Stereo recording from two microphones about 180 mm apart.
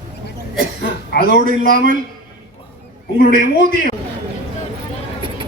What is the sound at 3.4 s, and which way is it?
Speech, 45° right (ahead or behind).